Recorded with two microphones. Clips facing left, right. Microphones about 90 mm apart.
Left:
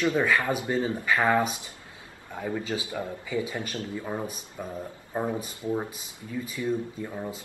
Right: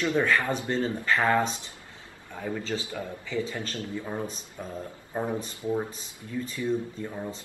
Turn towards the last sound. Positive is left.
turn(degrees=5)  # may be behind; listen again after turning